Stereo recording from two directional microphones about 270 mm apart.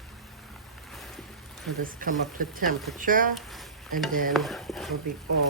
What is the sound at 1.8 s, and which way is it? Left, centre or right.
Speech, right.